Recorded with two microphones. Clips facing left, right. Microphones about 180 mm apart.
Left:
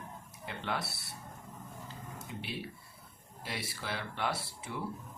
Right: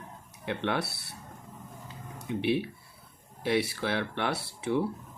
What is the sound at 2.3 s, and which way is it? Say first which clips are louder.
Speech: right 15 dB; 65° right (ahead or behind).